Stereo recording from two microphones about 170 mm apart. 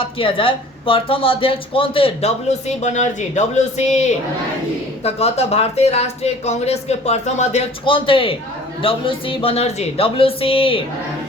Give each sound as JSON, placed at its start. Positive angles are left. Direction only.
{"t": 0.0, "sound": "speech", "side_deg": 30}
{"t": 7.9, "sound": "speech", "side_deg": 30}